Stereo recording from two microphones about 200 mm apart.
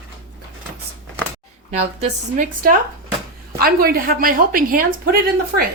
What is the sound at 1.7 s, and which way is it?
A woman's voice, 40° right (ahead or behind).